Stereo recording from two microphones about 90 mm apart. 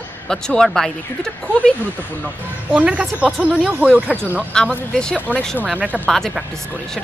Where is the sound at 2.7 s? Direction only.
10° right (ahead or behind).